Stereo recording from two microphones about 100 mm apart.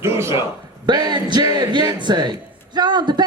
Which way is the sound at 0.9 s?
45° right (ahead or behind).